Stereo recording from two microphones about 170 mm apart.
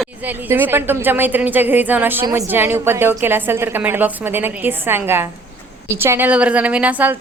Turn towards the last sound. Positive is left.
turn(degrees=-10)  # may be behind; listen again after turning